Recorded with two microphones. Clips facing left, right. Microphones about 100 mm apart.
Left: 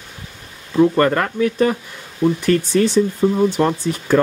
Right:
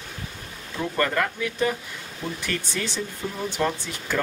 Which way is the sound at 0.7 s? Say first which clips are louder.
Left 10 dB; 45° left (ahead or behind).